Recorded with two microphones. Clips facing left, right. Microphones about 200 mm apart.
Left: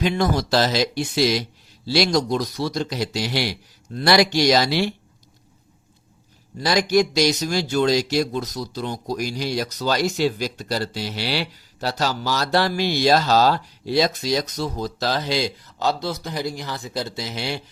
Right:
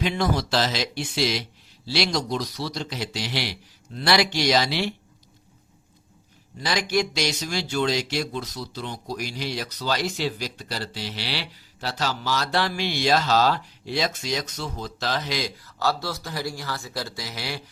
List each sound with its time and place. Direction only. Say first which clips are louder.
0.0 s a man's voice: left 3 dB; 40° left (ahead or behind)
6.6 s speech: left 6 dB; 40° left (ahead or behind); by 17.6 s 25° left (ahead or behind)